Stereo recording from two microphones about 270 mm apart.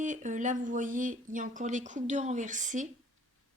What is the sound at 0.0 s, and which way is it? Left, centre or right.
A woman's voice, right.